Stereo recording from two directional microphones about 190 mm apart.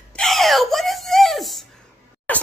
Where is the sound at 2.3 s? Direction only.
10° left (ahead or behind).